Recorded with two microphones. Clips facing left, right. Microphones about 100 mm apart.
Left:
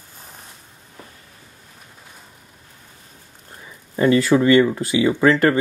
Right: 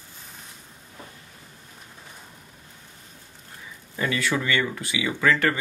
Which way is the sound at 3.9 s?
35° left (ahead or behind).